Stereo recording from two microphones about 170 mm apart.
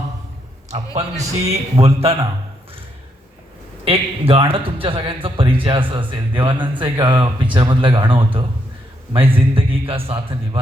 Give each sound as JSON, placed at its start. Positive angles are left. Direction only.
{"t": 0.9, "sound": "a man's voice", "side_deg": -40}
{"t": 3.8, "sound": "a man's voice", "side_deg": -35}